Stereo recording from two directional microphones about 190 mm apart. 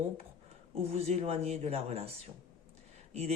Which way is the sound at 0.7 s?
30° right (ahead or behind).